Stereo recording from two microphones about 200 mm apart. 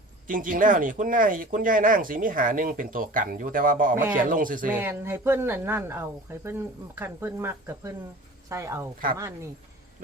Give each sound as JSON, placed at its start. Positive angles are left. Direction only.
{"t": 0.3, "sound": "speech", "side_deg": -45}
{"t": 4.7, "sound": "speech", "side_deg": -10}